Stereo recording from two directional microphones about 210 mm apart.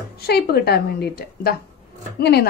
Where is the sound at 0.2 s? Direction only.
50° left (ahead or behind).